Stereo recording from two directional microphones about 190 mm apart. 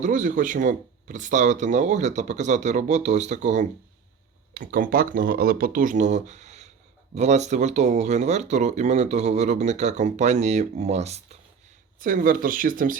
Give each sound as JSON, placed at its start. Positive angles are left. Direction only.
{"t": 0.0, "sound": "speech", "side_deg": -45}
{"t": 12.0, "sound": "speech", "side_deg": -45}